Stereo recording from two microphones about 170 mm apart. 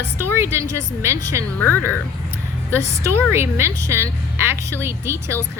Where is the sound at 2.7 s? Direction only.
15° right (ahead or behind).